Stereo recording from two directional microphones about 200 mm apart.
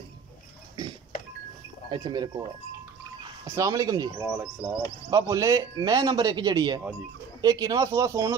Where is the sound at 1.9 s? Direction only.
20° right (ahead or behind).